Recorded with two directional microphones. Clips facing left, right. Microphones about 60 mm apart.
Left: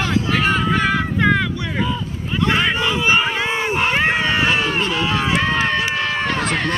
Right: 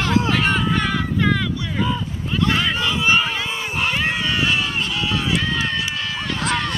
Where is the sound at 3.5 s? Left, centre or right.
Left.